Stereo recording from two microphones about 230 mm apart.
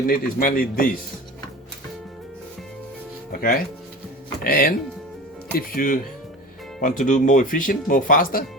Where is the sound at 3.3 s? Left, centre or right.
Left.